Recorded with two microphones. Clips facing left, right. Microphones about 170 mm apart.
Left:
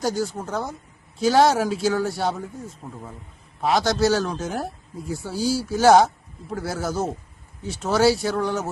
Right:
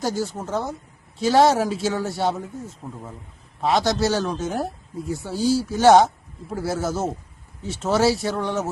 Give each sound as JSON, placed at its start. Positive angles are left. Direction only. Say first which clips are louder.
{"t": 0.0, "sound": "speech", "louder": "left 1 dB", "side_deg": 0}